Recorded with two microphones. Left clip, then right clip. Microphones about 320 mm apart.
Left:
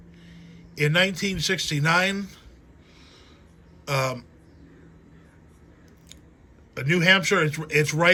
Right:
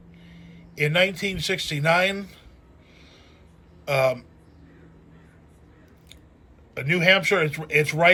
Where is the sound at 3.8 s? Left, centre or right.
Centre.